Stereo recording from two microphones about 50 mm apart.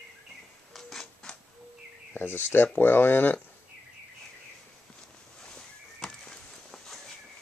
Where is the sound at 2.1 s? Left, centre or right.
Left.